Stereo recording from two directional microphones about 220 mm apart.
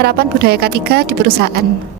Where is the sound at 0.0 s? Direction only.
45° right (ahead or behind).